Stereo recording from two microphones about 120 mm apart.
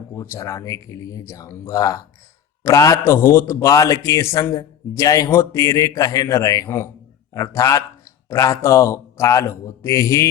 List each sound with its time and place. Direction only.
0.1 s a man's voice: 20° left (ahead or behind)